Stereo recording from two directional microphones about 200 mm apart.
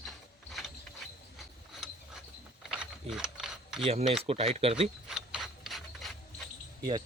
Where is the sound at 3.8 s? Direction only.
30° right (ahead or behind).